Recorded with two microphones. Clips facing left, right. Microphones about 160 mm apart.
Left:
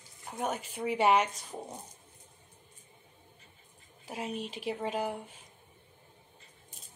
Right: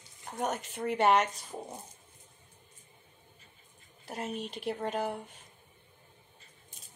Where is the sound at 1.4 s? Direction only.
5° right (ahead or behind).